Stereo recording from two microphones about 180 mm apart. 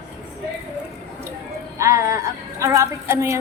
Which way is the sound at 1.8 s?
15° right (ahead or behind).